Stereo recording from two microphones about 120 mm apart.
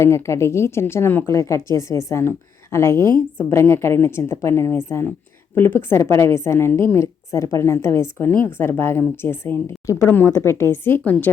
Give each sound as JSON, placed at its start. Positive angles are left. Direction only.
{"t": 0.0, "sound": "a woman's voice", "side_deg": 25}